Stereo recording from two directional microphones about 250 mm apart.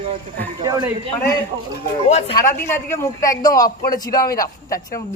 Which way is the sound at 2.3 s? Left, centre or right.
Centre.